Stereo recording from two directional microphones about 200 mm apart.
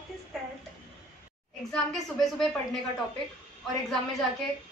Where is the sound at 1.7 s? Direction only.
Centre (ahead or behind).